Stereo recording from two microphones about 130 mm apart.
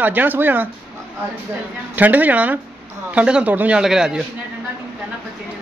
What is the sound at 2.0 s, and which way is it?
A woman's voice, 10° right (ahead or behind).